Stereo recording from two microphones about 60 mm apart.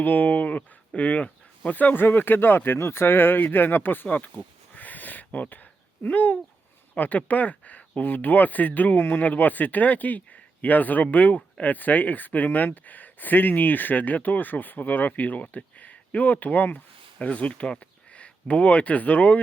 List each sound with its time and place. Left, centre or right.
0.0 s speech: left
4.7 s a sound: left
6.9 s speech: left